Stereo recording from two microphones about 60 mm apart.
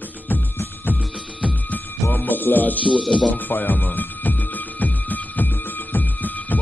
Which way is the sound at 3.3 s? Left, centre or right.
Left.